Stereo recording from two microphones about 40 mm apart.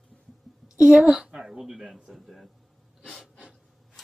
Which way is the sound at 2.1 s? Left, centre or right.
Centre.